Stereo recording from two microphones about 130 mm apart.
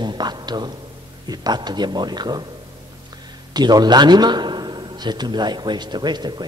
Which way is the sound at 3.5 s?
30° right (ahead or behind).